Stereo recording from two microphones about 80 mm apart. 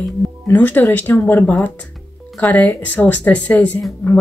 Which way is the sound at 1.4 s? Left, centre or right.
Centre.